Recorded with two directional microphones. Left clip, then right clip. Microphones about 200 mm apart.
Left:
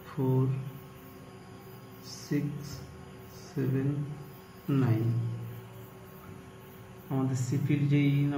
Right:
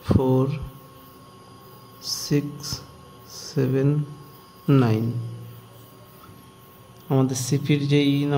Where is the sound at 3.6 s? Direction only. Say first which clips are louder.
Right 10 dB; 55° right (ahead or behind).